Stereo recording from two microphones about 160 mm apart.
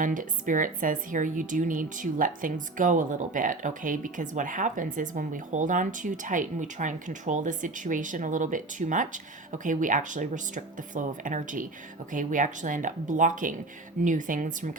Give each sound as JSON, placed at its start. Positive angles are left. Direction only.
{"t": 0.0, "sound": "speech", "side_deg": -55}